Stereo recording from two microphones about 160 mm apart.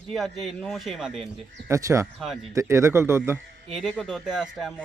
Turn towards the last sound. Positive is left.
turn(degrees=0)  # may be behind; listen again after turning